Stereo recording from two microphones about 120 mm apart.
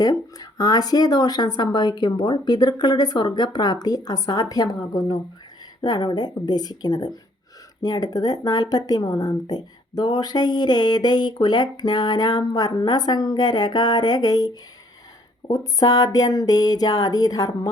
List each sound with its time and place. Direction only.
0.0 s speech: 35° left (ahead or behind)